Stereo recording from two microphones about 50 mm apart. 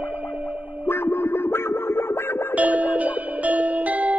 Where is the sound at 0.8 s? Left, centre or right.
Left.